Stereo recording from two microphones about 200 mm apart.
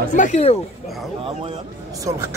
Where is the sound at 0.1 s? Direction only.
35° left (ahead or behind).